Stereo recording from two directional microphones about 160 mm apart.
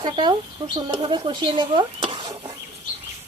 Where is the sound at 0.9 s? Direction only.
35° right (ahead or behind).